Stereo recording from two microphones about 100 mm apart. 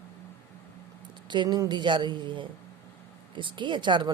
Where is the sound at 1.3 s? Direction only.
50° right (ahead or behind).